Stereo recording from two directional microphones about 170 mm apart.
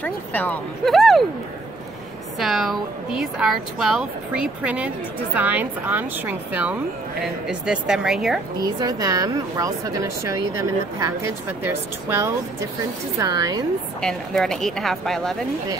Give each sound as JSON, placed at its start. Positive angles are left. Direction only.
{"t": 0.0, "sound": "speech", "side_deg": 10}
{"t": 2.3, "sound": "a woman's voice", "side_deg": 0}
{"t": 8.6, "sound": "a woman's voice", "side_deg": -25}
{"t": 14.0, "sound": "speech", "side_deg": 0}